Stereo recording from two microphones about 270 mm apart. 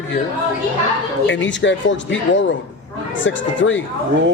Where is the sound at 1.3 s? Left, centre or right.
Left.